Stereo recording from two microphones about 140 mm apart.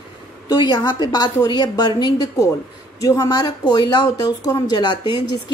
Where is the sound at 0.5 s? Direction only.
30° left (ahead or behind).